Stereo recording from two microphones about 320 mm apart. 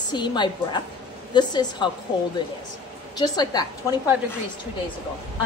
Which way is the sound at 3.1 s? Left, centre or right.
Centre.